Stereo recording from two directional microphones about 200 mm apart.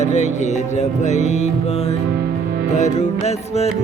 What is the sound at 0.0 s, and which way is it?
Music, 35° left (ahead or behind).